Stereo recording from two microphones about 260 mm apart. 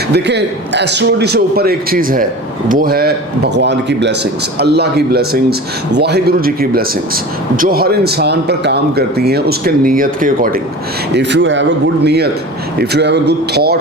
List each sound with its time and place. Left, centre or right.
0.1 s a man's voice: right